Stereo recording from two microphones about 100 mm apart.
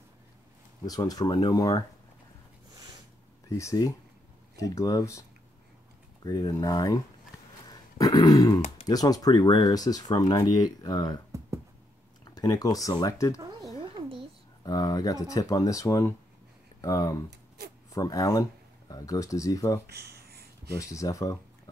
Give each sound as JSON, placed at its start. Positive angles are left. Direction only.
{"t": 0.8, "sound": "speech", "side_deg": 40}
{"t": 3.4, "sound": "speech", "side_deg": 35}
{"t": 6.2, "sound": "speech", "side_deg": 40}
{"t": 7.7, "sound": "a sound", "side_deg": 45}
{"t": 8.8, "sound": "speech", "side_deg": 40}
{"t": 12.3, "sound": "speech", "side_deg": 40}
{"t": 14.6, "sound": "speech", "side_deg": 35}
{"t": 20.9, "sound": "speech", "side_deg": 35}